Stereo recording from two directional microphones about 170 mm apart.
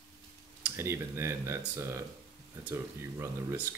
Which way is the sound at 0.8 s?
15° right (ahead or behind).